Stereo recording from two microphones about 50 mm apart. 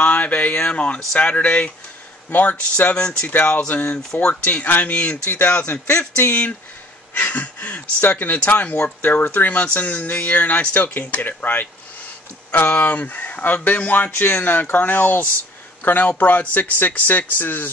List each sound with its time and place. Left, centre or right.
0.0 s a sound: left
0.7 s speech: centre
3.3 s speech: left